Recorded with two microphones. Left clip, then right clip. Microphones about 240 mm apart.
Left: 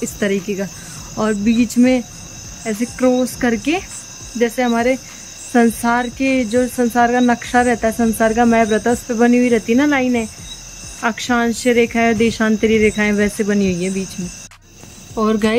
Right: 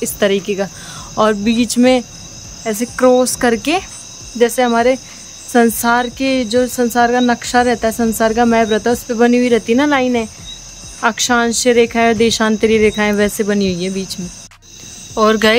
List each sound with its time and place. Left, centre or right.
0.0 s speech: centre
15.1 s speech: centre